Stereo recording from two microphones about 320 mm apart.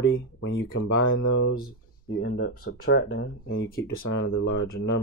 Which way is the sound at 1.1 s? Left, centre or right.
Left.